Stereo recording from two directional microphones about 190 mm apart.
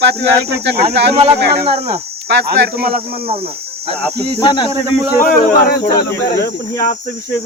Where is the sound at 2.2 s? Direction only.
60° right (ahead or behind).